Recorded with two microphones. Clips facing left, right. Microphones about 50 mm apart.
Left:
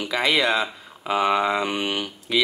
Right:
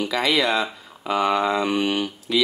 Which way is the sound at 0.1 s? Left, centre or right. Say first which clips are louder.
Left 2 dB; centre.